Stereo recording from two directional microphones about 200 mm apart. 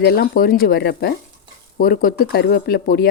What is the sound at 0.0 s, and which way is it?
Speech, 50° left (ahead or behind).